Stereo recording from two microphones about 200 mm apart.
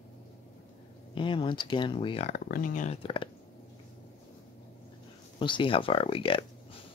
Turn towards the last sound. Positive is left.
turn(degrees=25)  # may be behind; listen again after turning